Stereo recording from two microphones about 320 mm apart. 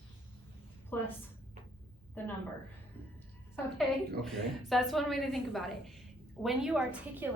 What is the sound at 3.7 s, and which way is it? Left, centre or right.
A woman's voice, centre.